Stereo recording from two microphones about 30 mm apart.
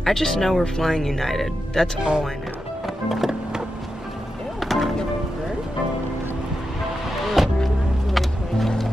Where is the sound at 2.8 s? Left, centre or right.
Centre.